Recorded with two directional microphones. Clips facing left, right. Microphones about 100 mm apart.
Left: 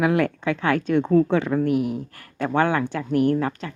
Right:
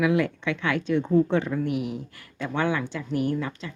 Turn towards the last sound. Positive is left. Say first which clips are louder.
# left 6 dB
turn(degrees=50)  # may be behind; listen again after turning